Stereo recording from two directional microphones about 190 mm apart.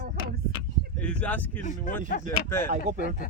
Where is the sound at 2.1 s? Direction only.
50° left (ahead or behind).